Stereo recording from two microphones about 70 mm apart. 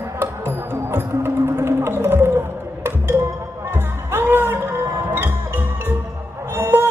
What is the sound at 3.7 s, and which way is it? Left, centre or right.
Music, right.